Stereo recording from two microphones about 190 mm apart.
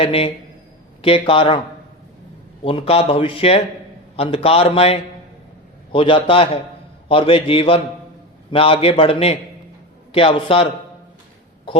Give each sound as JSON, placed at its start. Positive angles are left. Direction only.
{"t": 0.0, "sound": "speech", "side_deg": 30}
{"t": 2.6, "sound": "a man's voice", "side_deg": 30}
{"t": 11.7, "sound": "a sound", "side_deg": 30}